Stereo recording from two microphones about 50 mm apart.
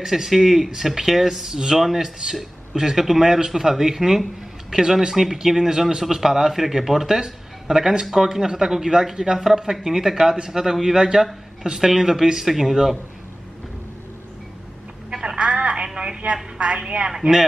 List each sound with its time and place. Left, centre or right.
0.0 s a man's voice: centre
15.0 s telephone: centre
16.5 s a man's voice: centre